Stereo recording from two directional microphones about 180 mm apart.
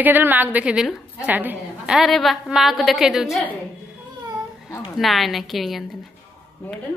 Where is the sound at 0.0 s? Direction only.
10° right (ahead or behind).